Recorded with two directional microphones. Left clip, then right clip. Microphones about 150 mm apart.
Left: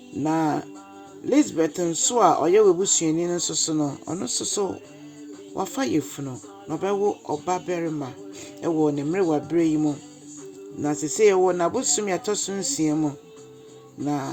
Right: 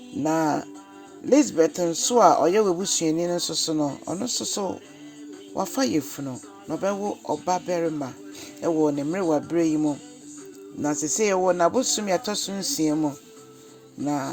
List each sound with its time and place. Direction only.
0.2 s speech: 35° right (ahead or behind)